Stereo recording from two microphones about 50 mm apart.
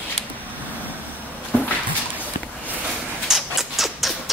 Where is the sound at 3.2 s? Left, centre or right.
Centre.